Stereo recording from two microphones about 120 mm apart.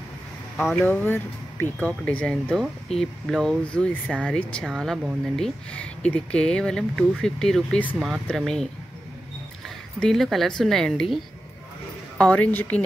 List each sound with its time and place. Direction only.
0.6 s speech: centre (ahead or behind)
0.8 s speech: 15° left (ahead or behind)
9.9 s speech: 5° left (ahead or behind)
12.2 s speech: 10° left (ahead or behind)